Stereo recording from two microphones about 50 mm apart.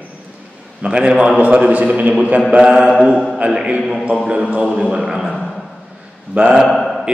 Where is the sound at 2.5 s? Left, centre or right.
Centre.